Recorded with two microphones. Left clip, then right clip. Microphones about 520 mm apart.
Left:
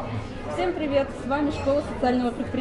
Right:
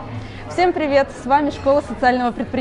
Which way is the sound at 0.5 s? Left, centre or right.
Right.